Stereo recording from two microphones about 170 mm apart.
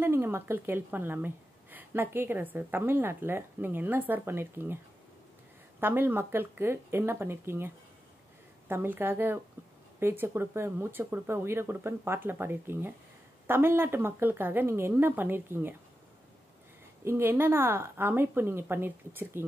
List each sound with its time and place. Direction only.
0.0 s a woman's voice: 15° right (ahead or behind)
5.8 s a woman's voice: 10° right (ahead or behind)
17.0 s a woman's voice: 15° right (ahead or behind)